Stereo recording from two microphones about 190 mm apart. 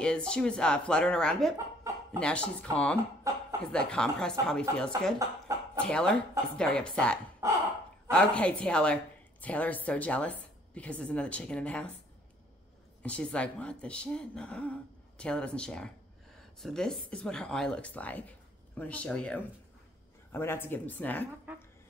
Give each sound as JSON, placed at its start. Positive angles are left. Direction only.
{"t": 0.0, "sound": "speech", "side_deg": 5}
{"t": 3.3, "sound": "chuckle", "side_deg": -15}
{"t": 3.7, "sound": "speech", "side_deg": 5}
{"t": 13.0, "sound": "speech", "side_deg": 5}